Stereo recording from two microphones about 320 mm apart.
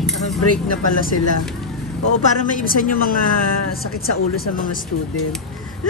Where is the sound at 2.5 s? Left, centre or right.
Left.